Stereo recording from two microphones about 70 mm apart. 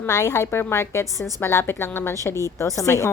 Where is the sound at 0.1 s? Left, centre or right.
Left.